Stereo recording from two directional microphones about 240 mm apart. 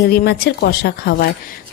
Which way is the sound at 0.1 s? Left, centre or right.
Left.